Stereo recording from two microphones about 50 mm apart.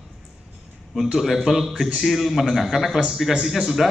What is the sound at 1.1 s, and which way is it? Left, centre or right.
A man's voice, centre.